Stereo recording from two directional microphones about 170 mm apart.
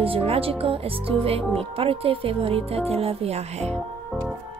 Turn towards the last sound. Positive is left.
turn(degrees=5)  # may be behind; listen again after turning